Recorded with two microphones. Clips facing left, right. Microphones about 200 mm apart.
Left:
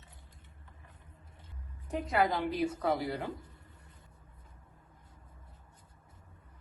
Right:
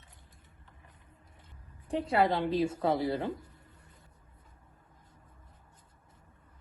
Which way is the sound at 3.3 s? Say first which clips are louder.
Right 1 dB; 25° left (ahead or behind).